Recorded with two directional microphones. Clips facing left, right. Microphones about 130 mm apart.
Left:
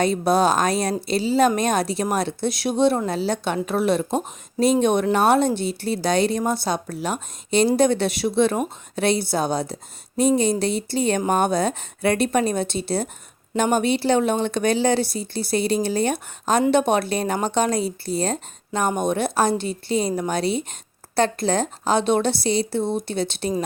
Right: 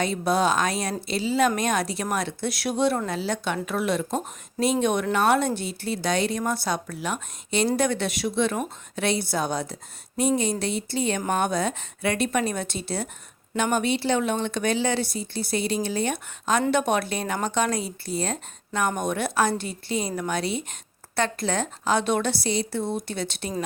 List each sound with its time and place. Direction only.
0.0 s a woman's voice: 35° left (ahead or behind)